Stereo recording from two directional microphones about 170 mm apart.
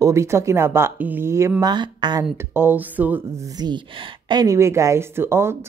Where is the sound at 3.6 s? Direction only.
25° right (ahead or behind).